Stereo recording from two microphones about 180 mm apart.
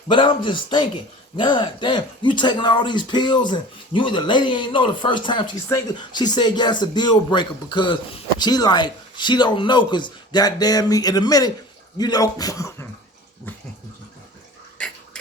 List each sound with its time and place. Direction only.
0.1 s speech: 25° left (ahead or behind)